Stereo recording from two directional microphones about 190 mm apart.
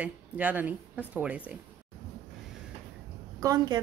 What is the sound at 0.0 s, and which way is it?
A woman's voice, 10° right (ahead or behind).